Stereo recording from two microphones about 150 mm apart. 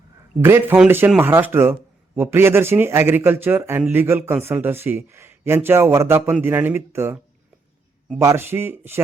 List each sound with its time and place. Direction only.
0.4 s a man's voice: 15° right (ahead or behind)
8.2 s a man's voice: 15° right (ahead or behind)